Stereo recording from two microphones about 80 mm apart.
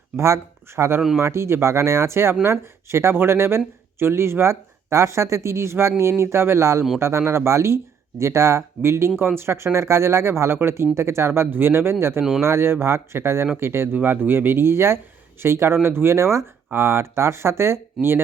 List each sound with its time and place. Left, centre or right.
0.8 s speech: right